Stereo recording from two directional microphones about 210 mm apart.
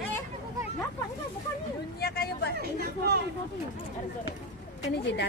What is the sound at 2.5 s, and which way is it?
Speech, 50° right (ahead or behind).